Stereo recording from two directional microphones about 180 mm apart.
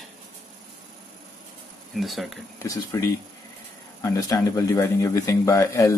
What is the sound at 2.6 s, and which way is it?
Speech, 20° left (ahead or behind).